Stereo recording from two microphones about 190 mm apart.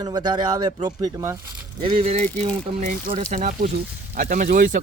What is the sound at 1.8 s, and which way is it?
Speech, 30° right (ahead or behind).